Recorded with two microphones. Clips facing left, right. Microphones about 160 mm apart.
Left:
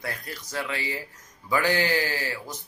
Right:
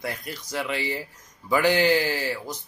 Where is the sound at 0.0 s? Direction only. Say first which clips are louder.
Right 3 dB; 10° right (ahead or behind).